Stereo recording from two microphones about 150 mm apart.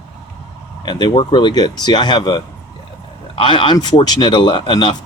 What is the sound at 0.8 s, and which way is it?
Speech, 30° left (ahead or behind).